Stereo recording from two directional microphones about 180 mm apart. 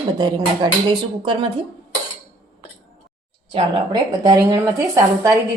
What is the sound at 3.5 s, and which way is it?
A woman's voice, 25° right (ahead or behind).